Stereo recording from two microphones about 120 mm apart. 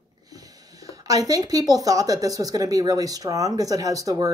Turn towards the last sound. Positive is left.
turn(degrees=-30)  # may be behind; listen again after turning